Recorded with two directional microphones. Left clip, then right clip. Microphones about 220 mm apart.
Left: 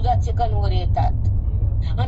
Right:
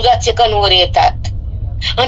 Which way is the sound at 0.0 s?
50° right (ahead or behind).